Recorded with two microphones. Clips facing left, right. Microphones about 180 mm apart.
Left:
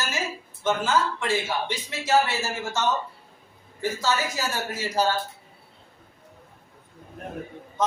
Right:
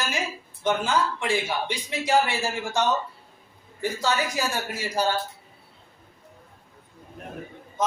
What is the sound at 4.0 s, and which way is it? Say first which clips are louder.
A man's voice: right 2 dB; 15° right (ahead or behind).